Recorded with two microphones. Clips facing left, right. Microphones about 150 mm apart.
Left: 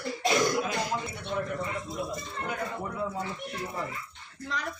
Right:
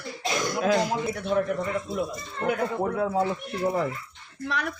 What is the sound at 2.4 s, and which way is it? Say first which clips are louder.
Speech: right 10 dB; 65° right (ahead or behind).